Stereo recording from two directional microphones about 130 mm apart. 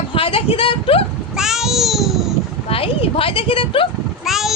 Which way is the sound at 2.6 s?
45° left (ahead or behind).